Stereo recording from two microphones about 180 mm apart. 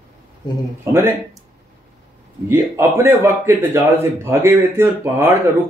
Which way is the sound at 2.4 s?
15° right (ahead or behind).